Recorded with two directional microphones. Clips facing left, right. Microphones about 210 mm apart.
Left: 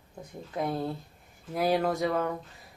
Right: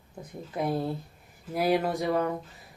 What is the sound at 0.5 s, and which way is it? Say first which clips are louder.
Speech: right 2 dB; centre (ahead or behind).